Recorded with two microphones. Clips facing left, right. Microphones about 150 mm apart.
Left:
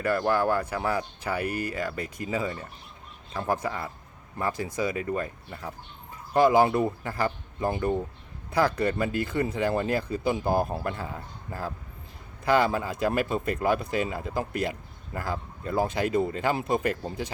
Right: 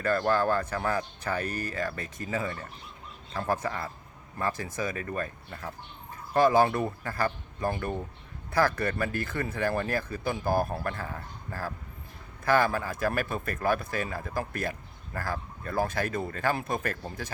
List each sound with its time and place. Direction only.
0.0 s speech: 15° left (ahead or behind)